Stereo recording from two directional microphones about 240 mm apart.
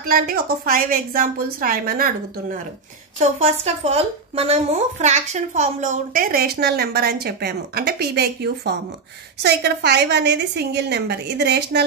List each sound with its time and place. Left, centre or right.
0.0 s speech: right
3.2 s a woman's voice: right